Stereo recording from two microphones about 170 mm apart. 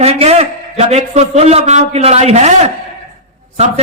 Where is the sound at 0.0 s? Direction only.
35° right (ahead or behind).